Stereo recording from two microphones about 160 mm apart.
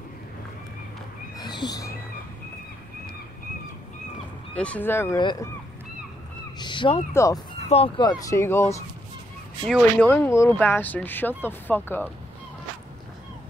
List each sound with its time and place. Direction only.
1.4 s neigh: 25° left (ahead or behind)
4.6 s speech: 10° left (ahead or behind)
5.2 s speech: 25° left (ahead or behind)
6.6 s cat: 30° left (ahead or behind)
7.1 s speech: 15° left (ahead or behind)
7.6 s speech: 40° left (ahead or behind)
8.0 s speech: 25° left (ahead or behind)